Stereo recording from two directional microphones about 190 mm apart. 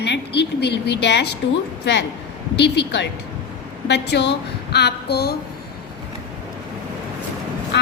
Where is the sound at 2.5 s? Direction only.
65° left (ahead or behind).